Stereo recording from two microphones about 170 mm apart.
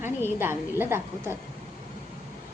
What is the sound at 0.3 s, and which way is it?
A woman's voice, 15° right (ahead or behind).